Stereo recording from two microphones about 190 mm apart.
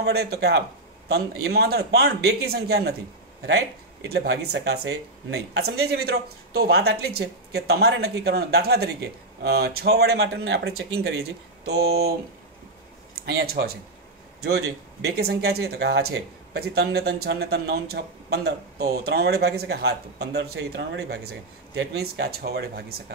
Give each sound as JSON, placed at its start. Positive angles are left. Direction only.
{"t": 0.0, "sound": "speech", "side_deg": -55}
{"t": 4.1, "sound": "speech", "side_deg": -55}
{"t": 13.1, "sound": "speech", "side_deg": -55}